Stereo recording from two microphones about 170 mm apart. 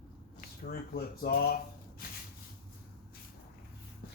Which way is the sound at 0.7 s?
60° left (ahead or behind).